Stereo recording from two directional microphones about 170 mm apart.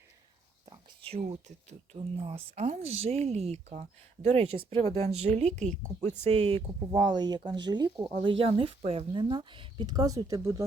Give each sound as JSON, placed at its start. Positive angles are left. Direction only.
{"t": 0.6, "sound": "speech", "side_deg": -35}